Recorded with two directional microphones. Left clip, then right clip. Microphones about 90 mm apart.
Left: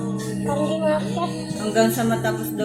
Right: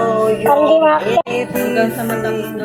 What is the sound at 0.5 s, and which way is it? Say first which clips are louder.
Speech: right 10 dB; 35° right (ahead or behind).